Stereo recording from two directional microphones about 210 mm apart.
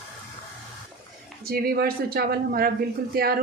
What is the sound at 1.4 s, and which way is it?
Speech, 45° right (ahead or behind).